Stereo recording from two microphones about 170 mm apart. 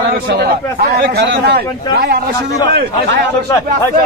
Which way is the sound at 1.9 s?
65° right (ahead or behind).